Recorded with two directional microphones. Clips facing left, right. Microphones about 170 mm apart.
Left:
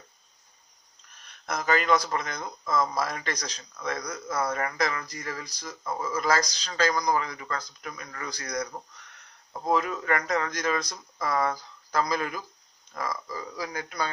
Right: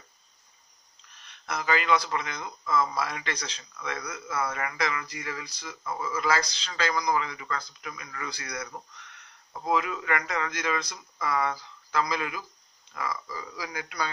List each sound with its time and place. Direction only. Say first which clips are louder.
1.2 s speech: left 2 dB; 45° left (ahead or behind)
9.7 s speech: left 2 dB; 40° left (ahead or behind)